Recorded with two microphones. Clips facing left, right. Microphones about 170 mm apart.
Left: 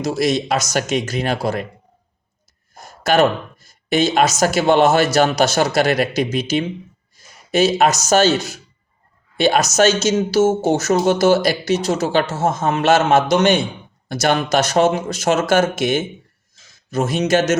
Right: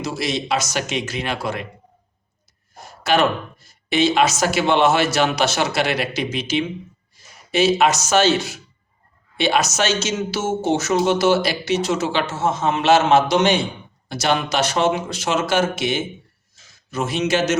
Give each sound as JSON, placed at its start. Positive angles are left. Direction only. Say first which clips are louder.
{"t": 0.0, "sound": "speech", "louder": "left 6 dB", "side_deg": 45}
{"t": 2.7, "sound": "speech", "louder": "left 3 dB", "side_deg": 45}